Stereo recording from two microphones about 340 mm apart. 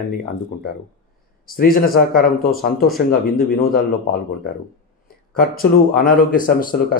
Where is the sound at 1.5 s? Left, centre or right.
Left.